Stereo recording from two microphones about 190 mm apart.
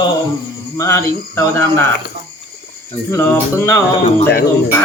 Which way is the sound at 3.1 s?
10° left (ahead or behind).